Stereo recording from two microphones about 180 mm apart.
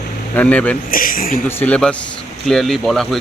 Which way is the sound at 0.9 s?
50° left (ahead or behind).